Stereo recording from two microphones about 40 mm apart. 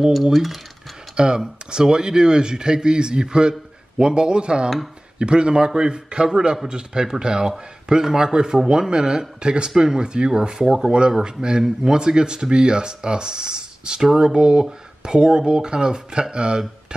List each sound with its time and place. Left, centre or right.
0.1 s a sound: centre
1.1 s a man's voice: centre
12.0 s a man's voice: centre